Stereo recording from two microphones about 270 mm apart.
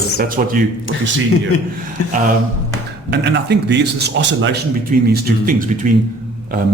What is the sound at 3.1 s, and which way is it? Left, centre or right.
A man's voice, right.